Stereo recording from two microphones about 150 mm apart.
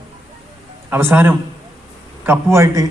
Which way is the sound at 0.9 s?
15° right (ahead or behind).